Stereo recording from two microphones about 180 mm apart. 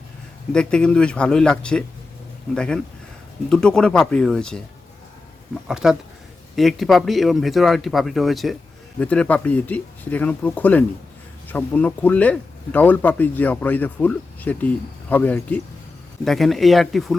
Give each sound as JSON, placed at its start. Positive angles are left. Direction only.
{"t": 0.5, "sound": "speech", "side_deg": 5}
{"t": 5.6, "sound": "speech", "side_deg": -5}